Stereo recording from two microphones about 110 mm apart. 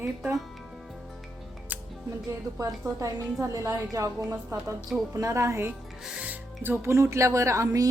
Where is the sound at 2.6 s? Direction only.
30° right (ahead or behind).